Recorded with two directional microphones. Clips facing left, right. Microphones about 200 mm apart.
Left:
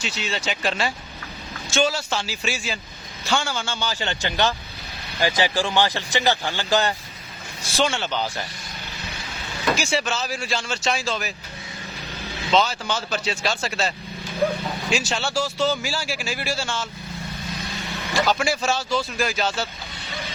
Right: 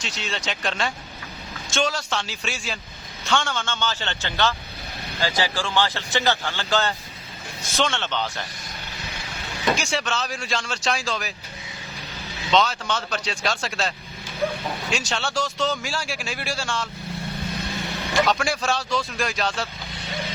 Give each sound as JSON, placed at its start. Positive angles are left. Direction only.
{"t": 0.0, "sound": "a man's voice", "side_deg": 5}
{"t": 9.7, "sound": "a man's voice", "side_deg": 5}
{"t": 12.5, "sound": "a man's voice", "side_deg": 5}
{"t": 18.3, "sound": "a man's voice", "side_deg": 0}